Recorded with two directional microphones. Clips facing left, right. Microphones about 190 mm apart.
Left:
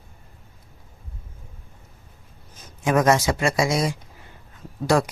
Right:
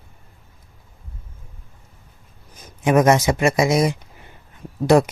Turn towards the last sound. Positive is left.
turn(degrees=-20)  # may be behind; listen again after turning